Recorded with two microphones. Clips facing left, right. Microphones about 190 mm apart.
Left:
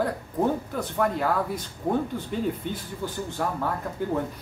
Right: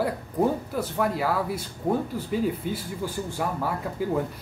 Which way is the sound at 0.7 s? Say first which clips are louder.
Even; 5° right (ahead or behind).